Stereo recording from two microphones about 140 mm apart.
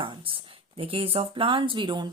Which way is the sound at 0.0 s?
40° right (ahead or behind).